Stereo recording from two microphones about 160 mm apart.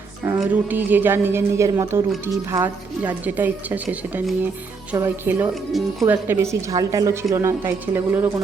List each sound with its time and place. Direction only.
0.3 s speech: 10° right (ahead or behind)
3.8 s speech: centre (ahead or behind)
4.9 s speech: 15° right (ahead or behind)